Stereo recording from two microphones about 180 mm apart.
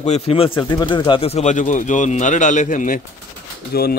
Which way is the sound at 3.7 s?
60° left (ahead or behind).